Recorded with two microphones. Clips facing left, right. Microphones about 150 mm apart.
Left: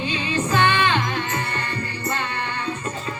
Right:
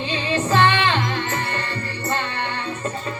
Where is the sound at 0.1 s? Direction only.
30° right (ahead or behind).